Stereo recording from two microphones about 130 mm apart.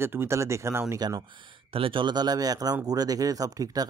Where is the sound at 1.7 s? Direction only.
40° right (ahead or behind).